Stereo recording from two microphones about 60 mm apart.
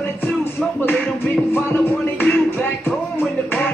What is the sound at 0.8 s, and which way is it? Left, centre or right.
Music, left.